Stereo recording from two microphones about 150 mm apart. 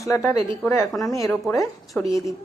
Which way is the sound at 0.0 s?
20° left (ahead or behind).